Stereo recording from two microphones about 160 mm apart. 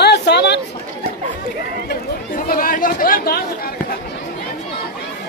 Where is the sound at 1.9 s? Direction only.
60° left (ahead or behind).